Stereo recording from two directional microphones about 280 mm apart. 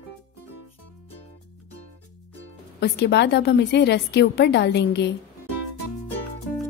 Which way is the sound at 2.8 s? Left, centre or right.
Left.